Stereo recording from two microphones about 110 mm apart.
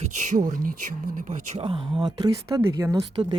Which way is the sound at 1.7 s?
50° right (ahead or behind).